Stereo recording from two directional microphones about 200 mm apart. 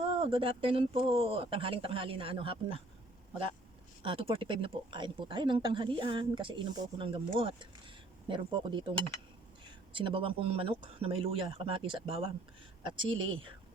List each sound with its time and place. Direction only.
0.1 s speech: 25° right (ahead or behind)
4.0 s speech: 25° right (ahead or behind)